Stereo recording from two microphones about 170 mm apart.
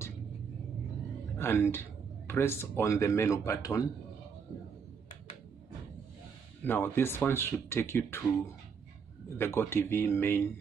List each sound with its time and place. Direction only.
1.4 s speech: 15° left (ahead or behind)
6.6 s speech: 10° left (ahead or behind)
9.4 s speech: 15° left (ahead or behind)